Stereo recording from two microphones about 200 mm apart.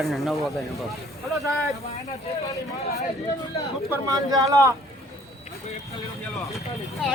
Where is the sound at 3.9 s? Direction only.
20° right (ahead or behind).